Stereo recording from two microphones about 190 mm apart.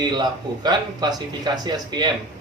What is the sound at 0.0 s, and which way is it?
Speech, 20° right (ahead or behind).